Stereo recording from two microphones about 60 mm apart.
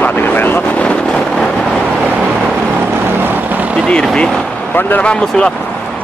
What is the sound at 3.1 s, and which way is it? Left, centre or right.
Vehicle, right.